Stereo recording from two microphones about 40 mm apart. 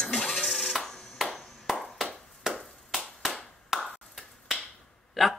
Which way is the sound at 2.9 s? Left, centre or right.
Centre.